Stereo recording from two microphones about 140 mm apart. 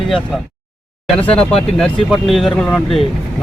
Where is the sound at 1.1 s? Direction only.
10° left (ahead or behind).